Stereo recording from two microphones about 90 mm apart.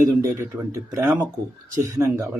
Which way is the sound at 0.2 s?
35° right (ahead or behind).